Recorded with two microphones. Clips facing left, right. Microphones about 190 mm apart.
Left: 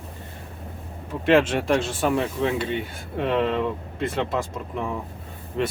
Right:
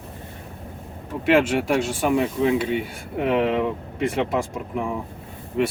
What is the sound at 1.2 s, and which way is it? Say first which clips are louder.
Speech: even; 10° right (ahead or behind).